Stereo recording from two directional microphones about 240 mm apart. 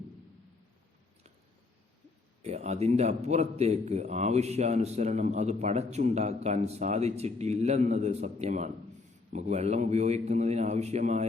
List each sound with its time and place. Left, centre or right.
2.4 s a man's voice: right